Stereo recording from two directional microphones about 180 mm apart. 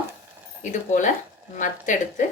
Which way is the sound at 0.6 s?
45° left (ahead or behind).